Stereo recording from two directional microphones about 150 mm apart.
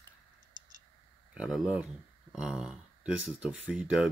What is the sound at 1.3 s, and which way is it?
Speech, 5° right (ahead or behind).